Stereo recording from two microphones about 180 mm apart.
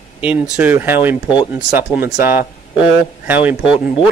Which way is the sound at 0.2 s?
10° right (ahead or behind).